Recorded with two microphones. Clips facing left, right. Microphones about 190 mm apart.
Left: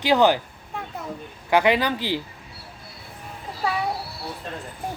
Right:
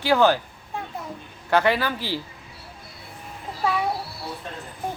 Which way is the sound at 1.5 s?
15° left (ahead or behind).